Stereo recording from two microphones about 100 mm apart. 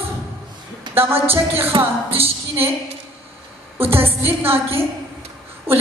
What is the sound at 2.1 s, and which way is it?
Speech, 75° right (ahead or behind).